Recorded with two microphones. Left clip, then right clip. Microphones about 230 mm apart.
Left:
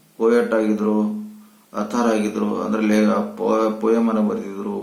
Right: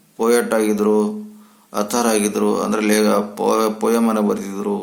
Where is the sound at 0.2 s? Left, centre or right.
Right.